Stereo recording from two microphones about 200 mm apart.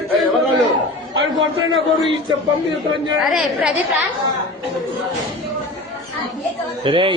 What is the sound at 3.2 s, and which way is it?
Speech, centre (ahead or behind).